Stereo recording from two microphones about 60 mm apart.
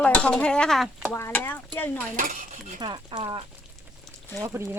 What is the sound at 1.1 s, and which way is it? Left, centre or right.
Speech, left.